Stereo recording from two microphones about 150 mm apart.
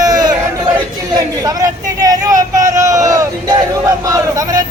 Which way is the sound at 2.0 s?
25° right (ahead or behind).